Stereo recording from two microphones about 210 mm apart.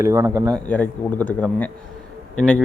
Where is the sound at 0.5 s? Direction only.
5° left (ahead or behind).